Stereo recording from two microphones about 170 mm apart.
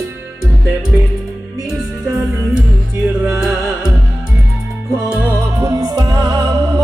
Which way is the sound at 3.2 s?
5° right (ahead or behind).